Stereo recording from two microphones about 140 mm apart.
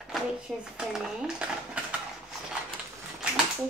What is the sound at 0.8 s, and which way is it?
Speech, 5° right (ahead or behind).